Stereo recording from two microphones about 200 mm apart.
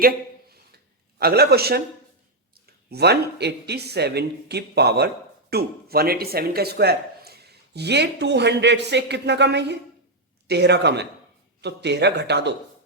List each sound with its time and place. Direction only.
1.2 s speech: 50° right (ahead or behind)